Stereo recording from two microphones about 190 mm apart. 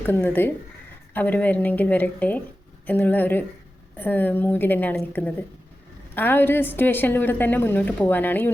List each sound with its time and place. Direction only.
0.0 s a woman's voice: 10° left (ahead or behind)